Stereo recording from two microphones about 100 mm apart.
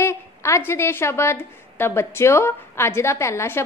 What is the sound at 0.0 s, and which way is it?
A woman's voice, 25° left (ahead or behind).